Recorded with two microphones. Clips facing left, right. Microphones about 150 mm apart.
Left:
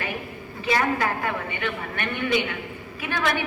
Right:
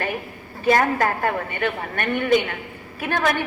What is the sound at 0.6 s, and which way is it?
A woman's voice, 45° right (ahead or behind).